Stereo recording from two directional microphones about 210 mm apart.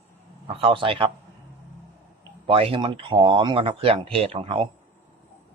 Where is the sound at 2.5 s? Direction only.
25° right (ahead or behind).